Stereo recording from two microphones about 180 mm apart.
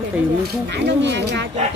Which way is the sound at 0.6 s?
75° right (ahead or behind).